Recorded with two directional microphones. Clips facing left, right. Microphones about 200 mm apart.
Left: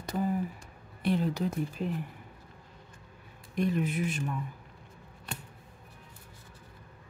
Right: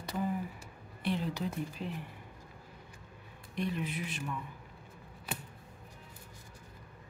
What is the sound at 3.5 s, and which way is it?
Speech, 45° left (ahead or behind).